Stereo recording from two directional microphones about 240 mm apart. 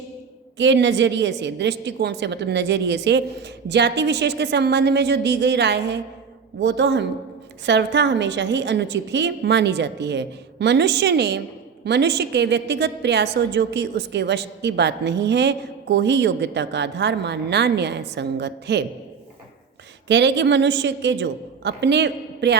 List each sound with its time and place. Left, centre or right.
0.6 s a woman's voice: right
20.1 s a woman's voice: right